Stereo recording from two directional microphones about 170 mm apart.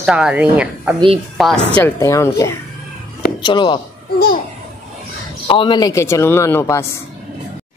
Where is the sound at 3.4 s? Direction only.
30° left (ahead or behind).